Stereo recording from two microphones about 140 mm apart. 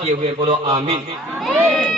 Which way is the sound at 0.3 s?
35° right (ahead or behind).